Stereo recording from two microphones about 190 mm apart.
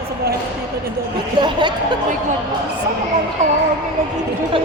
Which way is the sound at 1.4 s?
25° right (ahead or behind).